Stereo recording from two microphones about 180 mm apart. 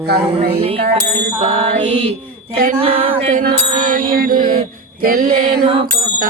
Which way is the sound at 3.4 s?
50° right (ahead or behind).